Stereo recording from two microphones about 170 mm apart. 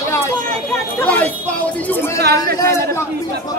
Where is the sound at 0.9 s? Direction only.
10° left (ahead or behind).